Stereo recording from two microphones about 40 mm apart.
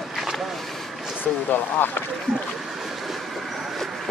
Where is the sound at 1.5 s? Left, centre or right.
Left.